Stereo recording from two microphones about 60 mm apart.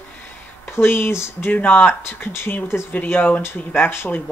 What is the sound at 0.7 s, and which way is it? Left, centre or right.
Speech, left.